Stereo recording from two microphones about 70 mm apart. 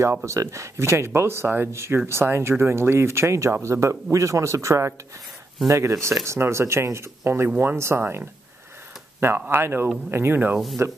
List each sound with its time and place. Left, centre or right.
0.1 s speech: right
8.0 s speech: right
9.2 s speech: right